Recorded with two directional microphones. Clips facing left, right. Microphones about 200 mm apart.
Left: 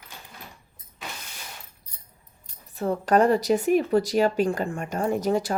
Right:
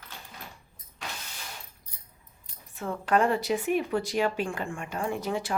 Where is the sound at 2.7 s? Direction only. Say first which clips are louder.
Left 5 dB; 40° left (ahead or behind).